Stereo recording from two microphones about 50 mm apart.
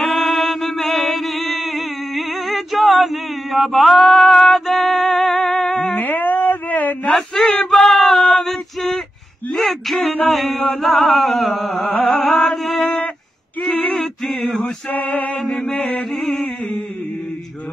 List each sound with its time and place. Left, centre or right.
0.0 s chant: centre
5.9 s a sound: left
7.1 s a sound: centre
7.7 s male singing: centre
9.5 s speech: centre
10.2 s chant: centre
11.9 s music: left
12.3 s chant: centre
13.6 s male singing: left
14.6 s male singing: left
16.0 s a sound: centre
16.3 s a sound: centre